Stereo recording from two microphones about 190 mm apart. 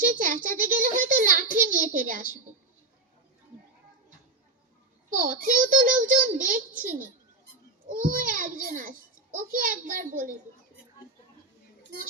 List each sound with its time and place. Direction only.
0.0 s a sound: 45° right (ahead or behind)
5.1 s a child's voice: 45° right (ahead or behind)
7.9 s a child's voice: 45° right (ahead or behind)